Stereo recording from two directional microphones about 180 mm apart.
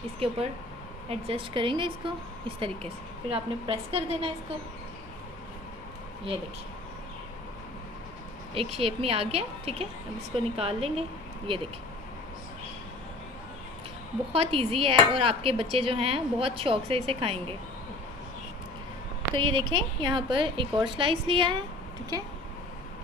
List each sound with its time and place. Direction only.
0.2 s dishes: 30° right (ahead or behind)
1.2 s a woman's voice: 30° right (ahead or behind)
2.4 s dishes: 30° right (ahead or behind)
8.5 s dishes: 30° right (ahead or behind)
14.3 s dishes: 30° right (ahead or behind)
19.3 s a woman's voice: 25° right (ahead or behind)